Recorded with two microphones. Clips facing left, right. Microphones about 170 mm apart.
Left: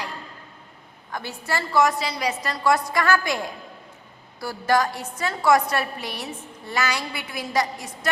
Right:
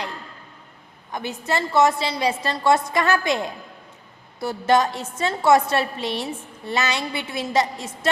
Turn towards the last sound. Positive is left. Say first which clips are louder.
# right 3 dB
turn(degrees=-25)  # may be behind; listen again after turning